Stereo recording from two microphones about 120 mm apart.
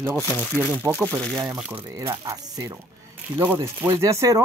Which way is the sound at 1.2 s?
5° left (ahead or behind).